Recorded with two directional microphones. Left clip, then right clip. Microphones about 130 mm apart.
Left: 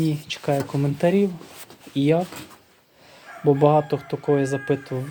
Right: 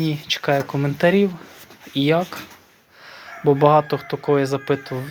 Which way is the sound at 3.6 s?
5° left (ahead or behind).